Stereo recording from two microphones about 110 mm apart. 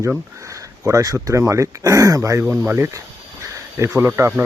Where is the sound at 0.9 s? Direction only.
30° right (ahead or behind).